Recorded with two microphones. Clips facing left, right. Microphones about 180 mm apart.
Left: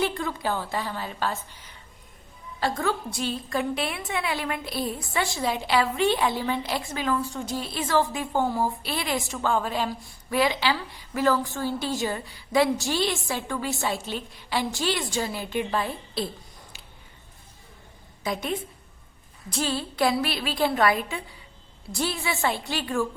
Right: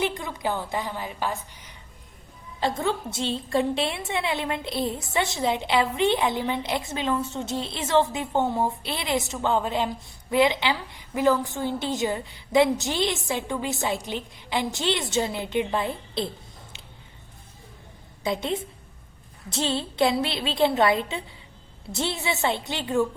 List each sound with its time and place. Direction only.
0.0 s a woman's voice: 20° right (ahead or behind)
2.6 s a woman's voice: 25° right (ahead or behind)
18.2 s a woman's voice: 25° right (ahead or behind)